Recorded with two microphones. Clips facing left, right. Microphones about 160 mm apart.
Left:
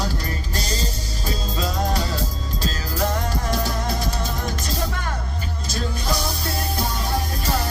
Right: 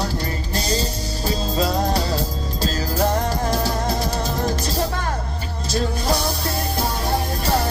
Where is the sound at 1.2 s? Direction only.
35° right (ahead or behind).